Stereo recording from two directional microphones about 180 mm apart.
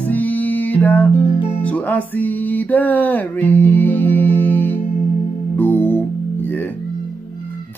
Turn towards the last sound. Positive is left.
turn(degrees=10)  # may be behind; listen again after turning